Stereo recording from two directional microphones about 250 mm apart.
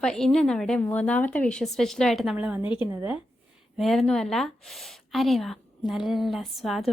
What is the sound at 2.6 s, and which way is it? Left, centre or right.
Speech, centre.